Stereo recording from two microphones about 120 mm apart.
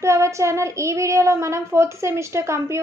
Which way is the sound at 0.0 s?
25° right (ahead or behind).